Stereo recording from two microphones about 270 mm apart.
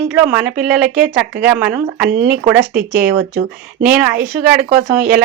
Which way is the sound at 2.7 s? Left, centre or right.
Right.